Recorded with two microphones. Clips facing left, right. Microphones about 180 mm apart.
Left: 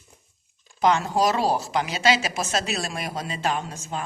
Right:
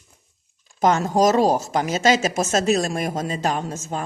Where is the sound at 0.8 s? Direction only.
45° right (ahead or behind).